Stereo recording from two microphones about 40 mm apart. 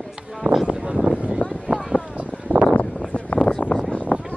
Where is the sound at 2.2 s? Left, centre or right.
Right.